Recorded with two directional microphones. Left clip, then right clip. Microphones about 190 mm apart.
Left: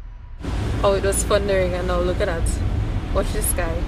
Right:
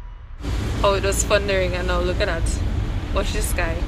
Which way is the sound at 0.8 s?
15° left (ahead or behind).